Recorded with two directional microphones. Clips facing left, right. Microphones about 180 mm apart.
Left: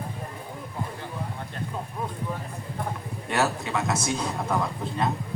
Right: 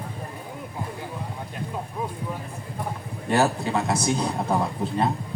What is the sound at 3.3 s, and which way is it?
A man's voice, 35° right (ahead or behind).